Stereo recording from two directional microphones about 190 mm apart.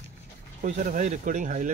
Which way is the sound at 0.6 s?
45° right (ahead or behind).